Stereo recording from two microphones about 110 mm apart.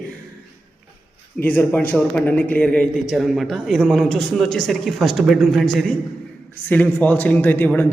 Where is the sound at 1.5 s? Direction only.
15° left (ahead or behind).